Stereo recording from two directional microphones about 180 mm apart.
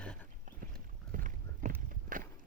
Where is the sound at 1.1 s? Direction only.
45° right (ahead or behind).